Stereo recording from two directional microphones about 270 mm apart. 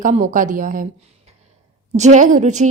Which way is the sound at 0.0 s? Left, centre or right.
Right.